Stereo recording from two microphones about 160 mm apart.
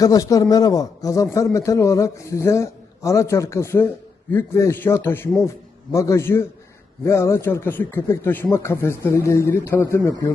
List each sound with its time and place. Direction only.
0.0 s a man's voice: 20° left (ahead or behind)